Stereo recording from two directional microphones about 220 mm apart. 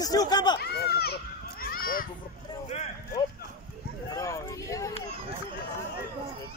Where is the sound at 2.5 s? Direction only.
30° left (ahead or behind).